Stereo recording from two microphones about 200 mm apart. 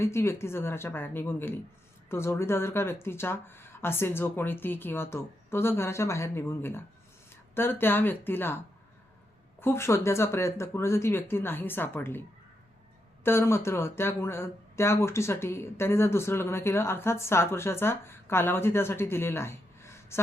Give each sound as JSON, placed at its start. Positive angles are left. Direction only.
{"t": 0.0, "sound": "speech", "side_deg": 15}
{"t": 9.6, "sound": "speech", "side_deg": 10}
{"t": 13.2, "sound": "speech", "side_deg": 10}